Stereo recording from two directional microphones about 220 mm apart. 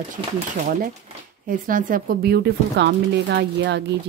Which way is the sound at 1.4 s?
40° right (ahead or behind).